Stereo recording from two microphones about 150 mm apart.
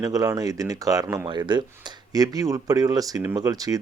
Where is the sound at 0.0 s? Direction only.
25° right (ahead or behind).